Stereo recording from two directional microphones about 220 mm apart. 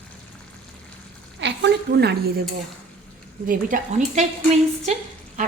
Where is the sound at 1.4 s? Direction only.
50° right (ahead or behind).